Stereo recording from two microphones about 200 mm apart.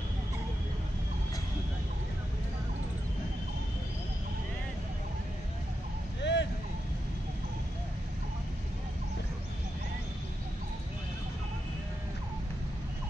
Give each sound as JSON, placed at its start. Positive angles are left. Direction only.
{"t": 6.2, "sound": "vehicle", "side_deg": 60}